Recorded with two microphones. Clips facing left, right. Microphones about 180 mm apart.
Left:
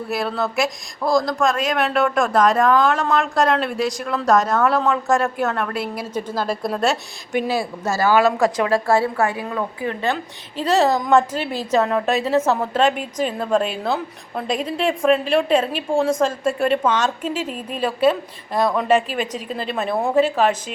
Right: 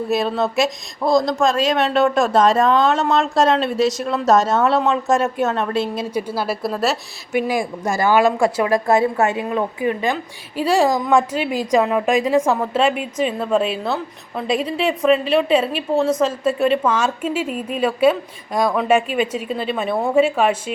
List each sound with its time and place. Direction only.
0.1 s speech: 20° right (ahead or behind)
6.1 s a woman's voice: 10° right (ahead or behind)
7.3 s a woman's voice: 15° right (ahead or behind)
8.9 s a woman's voice: 20° right (ahead or behind); by 20.1 s 5° left (ahead or behind)
20.4 s a woman's voice: 10° right (ahead or behind)